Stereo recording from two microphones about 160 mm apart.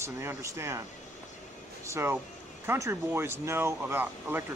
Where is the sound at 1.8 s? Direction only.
15° right (ahead or behind).